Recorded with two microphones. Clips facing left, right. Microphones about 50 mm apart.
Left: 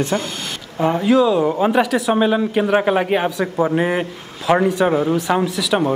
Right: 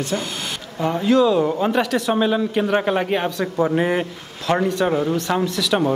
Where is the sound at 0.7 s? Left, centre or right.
Centre.